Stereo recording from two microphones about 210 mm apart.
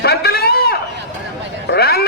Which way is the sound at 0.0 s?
50° left (ahead or behind).